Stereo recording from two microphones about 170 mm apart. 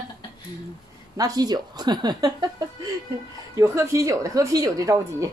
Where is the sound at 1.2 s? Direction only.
20° right (ahead or behind).